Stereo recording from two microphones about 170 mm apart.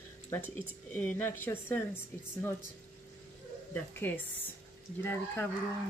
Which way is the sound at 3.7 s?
10° left (ahead or behind).